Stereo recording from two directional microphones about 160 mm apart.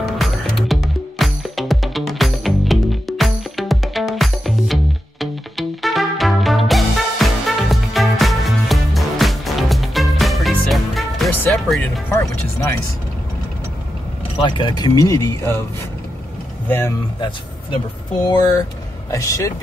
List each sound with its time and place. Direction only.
0.0 s music: centre (ahead or behind)
12.1 s music: 15° left (ahead or behind)
14.4 s speech: 30° left (ahead or behind)
16.6 s speech: 15° left (ahead or behind)
18.3 s speech: 25° left (ahead or behind)